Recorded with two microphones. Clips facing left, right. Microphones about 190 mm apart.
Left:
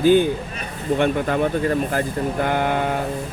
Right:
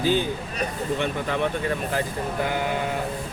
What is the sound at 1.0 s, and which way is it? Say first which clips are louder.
Speech: left 7 dB; 45° left (ahead or behind).